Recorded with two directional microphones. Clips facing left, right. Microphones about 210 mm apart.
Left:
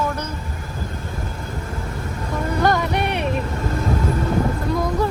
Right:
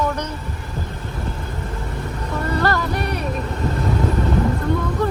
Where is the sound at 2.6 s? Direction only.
20° left (ahead or behind).